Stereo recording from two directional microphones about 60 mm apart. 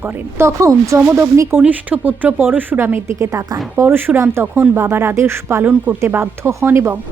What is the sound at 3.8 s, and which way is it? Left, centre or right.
Speech, right.